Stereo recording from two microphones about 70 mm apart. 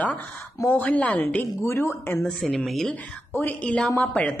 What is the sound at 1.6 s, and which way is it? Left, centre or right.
Speech, left.